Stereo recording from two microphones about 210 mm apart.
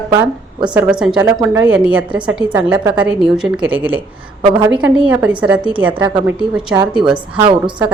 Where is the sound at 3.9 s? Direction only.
25° right (ahead or behind).